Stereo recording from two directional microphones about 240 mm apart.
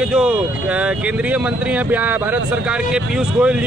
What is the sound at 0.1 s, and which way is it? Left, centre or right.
A man's voice, centre.